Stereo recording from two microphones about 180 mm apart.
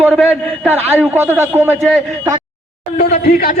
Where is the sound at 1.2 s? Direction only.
15° right (ahead or behind).